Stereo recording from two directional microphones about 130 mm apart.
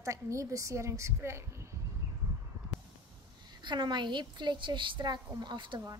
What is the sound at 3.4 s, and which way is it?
A woman's voice, 35° right (ahead or behind).